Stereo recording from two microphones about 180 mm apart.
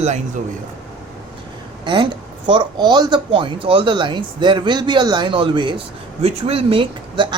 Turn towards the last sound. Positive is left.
turn(degrees=-30)  # may be behind; listen again after turning